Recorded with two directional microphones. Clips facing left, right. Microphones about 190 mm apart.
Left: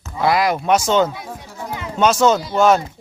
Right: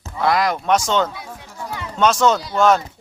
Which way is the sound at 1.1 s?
15° left (ahead or behind).